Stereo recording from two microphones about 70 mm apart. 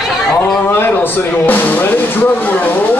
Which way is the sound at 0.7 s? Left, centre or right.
Left.